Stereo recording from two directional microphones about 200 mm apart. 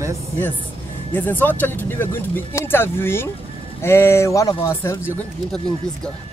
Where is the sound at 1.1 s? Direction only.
10° left (ahead or behind).